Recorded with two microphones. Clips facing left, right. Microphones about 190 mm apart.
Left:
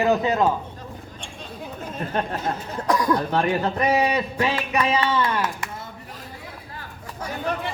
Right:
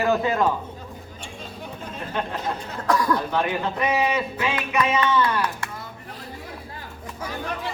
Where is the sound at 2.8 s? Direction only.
15° left (ahead or behind).